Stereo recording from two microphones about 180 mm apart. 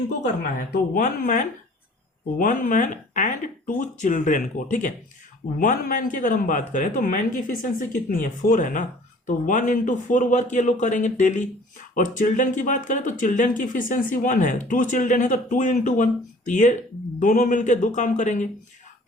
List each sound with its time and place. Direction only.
0.7 s speech: 50° left (ahead or behind)